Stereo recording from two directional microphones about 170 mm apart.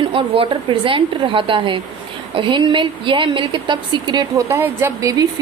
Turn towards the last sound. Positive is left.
turn(degrees=-15)  # may be behind; listen again after turning